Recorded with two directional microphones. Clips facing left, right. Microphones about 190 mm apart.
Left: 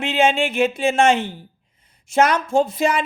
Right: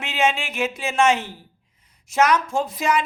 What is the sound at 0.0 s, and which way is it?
Speech, 30° left (ahead or behind).